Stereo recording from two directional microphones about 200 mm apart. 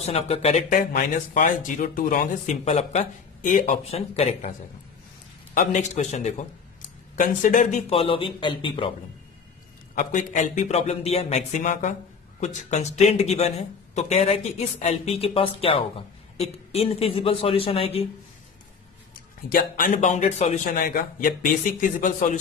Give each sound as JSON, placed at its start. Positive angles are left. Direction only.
{"t": 0.0, "sound": "speech", "side_deg": 30}
{"t": 5.5, "sound": "speech", "side_deg": 40}
{"t": 9.9, "sound": "speech", "side_deg": 35}
{"t": 19.5, "sound": "speech", "side_deg": 45}